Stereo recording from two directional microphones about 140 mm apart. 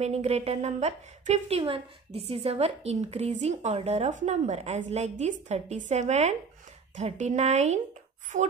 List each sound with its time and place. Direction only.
0.0 s a woman's voice: 50° right (ahead or behind)